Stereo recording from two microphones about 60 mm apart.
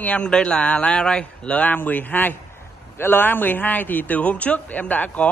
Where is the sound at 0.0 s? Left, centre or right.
Left.